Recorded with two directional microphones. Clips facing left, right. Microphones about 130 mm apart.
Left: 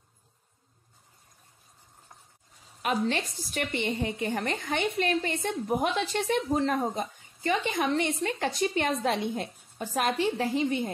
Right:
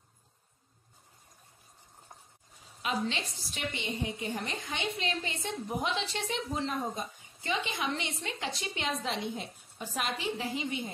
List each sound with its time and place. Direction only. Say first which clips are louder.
2.8 s a woman's voice: left 5 dB; 50° left (ahead or behind)